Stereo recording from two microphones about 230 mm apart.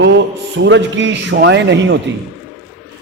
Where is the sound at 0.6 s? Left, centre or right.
Right.